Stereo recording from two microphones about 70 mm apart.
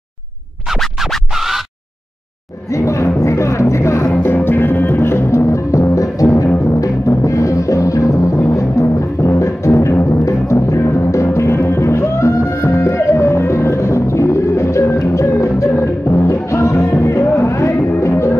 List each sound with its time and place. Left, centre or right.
0.7 s music: centre
2.7 s music: left
4.1 s music: left